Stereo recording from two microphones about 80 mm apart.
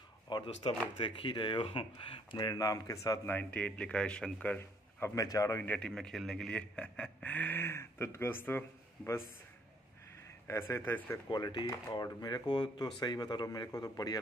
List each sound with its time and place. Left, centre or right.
0.3 s a sound: left
0.9 s speech: left
2.3 s speech: left
3.3 s speech: left
5.1 s speech: left
5.8 s a man's voice: centre; by 9.2 s left
10.4 s speech: left
11.2 s speech: left